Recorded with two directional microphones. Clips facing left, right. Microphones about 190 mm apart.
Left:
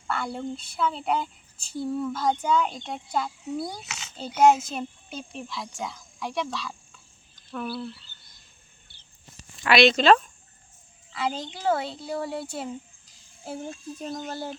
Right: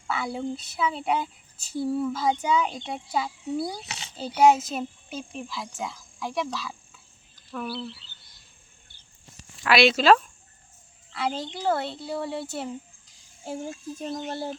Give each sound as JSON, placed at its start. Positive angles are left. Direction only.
{"t": 0.1, "sound": "speech", "side_deg": 0}
{"t": 3.8, "sound": "a child's voice", "side_deg": -35}
{"t": 4.4, "sound": "speech", "side_deg": 0}
{"t": 9.6, "sound": "speech", "side_deg": -5}